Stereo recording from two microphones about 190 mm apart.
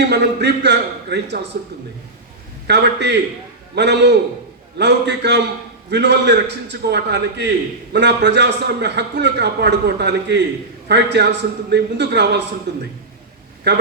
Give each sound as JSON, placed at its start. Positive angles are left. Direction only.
{"t": 0.0, "sound": "a man's voice", "side_deg": -60}
{"t": 2.6, "sound": "a man's voice", "side_deg": -65}